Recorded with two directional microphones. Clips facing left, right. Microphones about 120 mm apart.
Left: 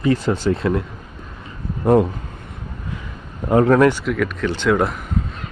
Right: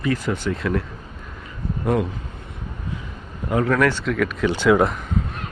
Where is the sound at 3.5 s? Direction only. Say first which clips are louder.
Left 6 dB; 35° left (ahead or behind).